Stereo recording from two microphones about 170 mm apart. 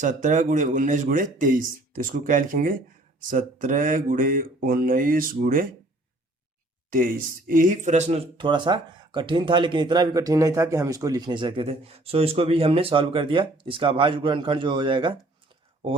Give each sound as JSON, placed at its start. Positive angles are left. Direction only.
{"t": 0.0, "sound": "speech", "side_deg": -45}
{"t": 6.9, "sound": "speech", "side_deg": -55}
{"t": 8.4, "sound": "speech", "side_deg": -30}